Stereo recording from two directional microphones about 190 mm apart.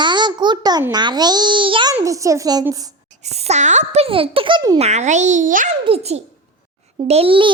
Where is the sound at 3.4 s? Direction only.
35° right (ahead or behind).